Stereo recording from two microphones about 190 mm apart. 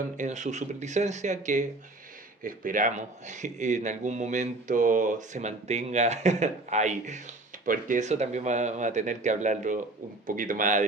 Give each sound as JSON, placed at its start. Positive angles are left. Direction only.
{"t": 0.2, "sound": "speech", "side_deg": -40}